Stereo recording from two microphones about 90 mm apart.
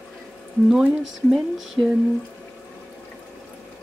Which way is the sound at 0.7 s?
Centre (ahead or behind).